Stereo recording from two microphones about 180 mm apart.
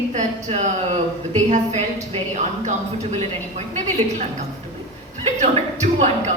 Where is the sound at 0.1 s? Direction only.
40° right (ahead or behind).